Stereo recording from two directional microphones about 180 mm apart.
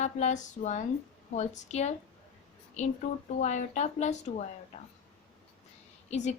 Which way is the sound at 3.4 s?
40° left (ahead or behind).